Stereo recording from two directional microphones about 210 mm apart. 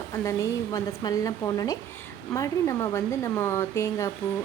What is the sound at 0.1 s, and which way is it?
Speech, 15° left (ahead or behind).